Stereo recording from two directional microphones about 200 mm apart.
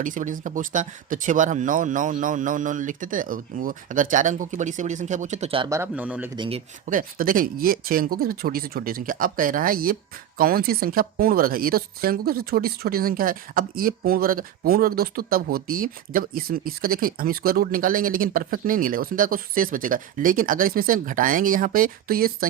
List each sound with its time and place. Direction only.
0.0 s speech: 40° right (ahead or behind)
5.6 s speech: 15° right (ahead or behind)
6.3 s speech: 25° right (ahead or behind)
6.9 s speech: 45° right (ahead or behind)